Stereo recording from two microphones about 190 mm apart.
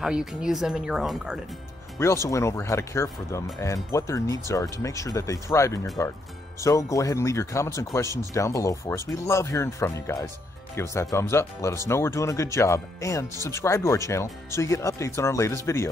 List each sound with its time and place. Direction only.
0.0 s speech: centre (ahead or behind)
2.2 s speech: 15° left (ahead or behind)